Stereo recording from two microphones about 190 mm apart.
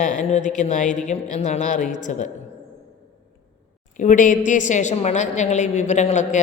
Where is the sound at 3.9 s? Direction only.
40° left (ahead or behind).